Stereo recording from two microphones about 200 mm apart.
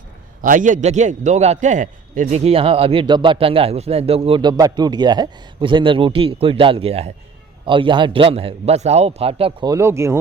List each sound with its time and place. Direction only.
0.4 s a man's voice: 40° right (ahead or behind); by 10.2 s 15° right (ahead or behind)